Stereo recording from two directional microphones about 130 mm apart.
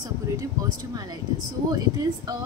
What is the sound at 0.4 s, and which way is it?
Speech, 30° right (ahead or behind).